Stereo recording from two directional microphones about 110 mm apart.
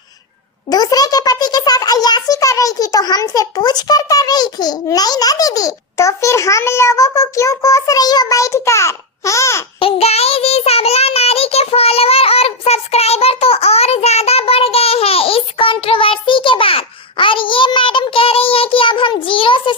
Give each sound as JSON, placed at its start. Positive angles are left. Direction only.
{"t": 0.7, "sound": "a child's voice", "side_deg": 35}
{"t": 9.8, "sound": "child singing", "side_deg": 70}